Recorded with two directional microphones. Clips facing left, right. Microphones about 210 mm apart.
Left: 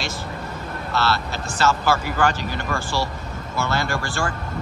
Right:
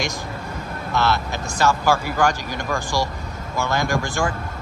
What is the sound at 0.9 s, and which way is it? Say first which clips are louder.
Speech: right 2 dB; 15° right (ahead or behind).